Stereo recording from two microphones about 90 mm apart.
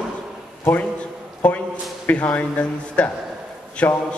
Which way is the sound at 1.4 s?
15° left (ahead or behind).